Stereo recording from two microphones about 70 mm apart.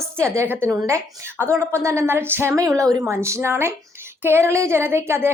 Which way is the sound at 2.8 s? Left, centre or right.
Right.